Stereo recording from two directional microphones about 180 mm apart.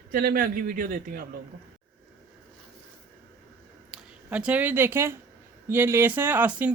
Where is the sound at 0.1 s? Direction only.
55° right (ahead or behind).